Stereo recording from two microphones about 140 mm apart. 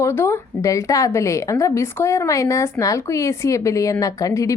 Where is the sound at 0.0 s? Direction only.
15° left (ahead or behind).